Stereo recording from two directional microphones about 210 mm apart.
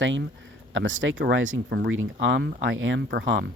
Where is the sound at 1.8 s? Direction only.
65° right (ahead or behind).